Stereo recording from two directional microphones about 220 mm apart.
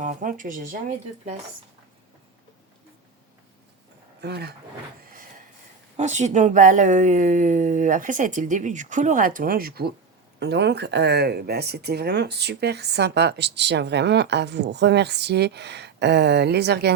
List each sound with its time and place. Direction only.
0.0 s a woman's voice: 35° right (ahead or behind)
4.2 s speech: 50° right (ahead or behind)
6.0 s a woman's voice: 30° right (ahead or behind); by 16.9 s 50° right (ahead or behind)